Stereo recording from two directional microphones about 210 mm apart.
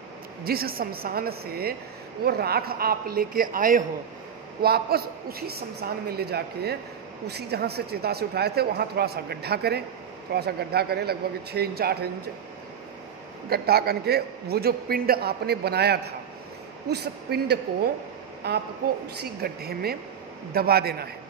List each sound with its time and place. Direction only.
0.4 s a man's voice: 45° right (ahead or behind)
13.5 s a man's voice: 45° right (ahead or behind)